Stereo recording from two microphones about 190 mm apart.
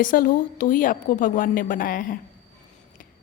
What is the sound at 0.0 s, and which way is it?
A woman's voice, 45° left (ahead or behind).